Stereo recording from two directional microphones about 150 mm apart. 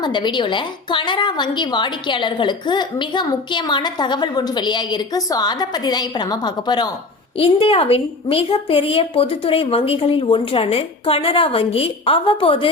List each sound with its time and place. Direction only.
0.0 s a woman's voice: 30° left (ahead or behind)
7.3 s a woman's voice: 40° left (ahead or behind)